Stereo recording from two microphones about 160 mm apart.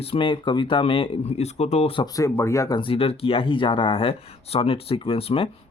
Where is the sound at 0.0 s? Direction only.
35° left (ahead or behind).